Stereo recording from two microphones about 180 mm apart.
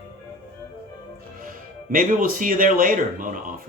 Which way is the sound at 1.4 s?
50° right (ahead or behind).